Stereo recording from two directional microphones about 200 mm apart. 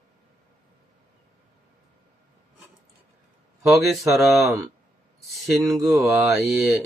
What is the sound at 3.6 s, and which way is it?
Speech, centre (ahead or behind).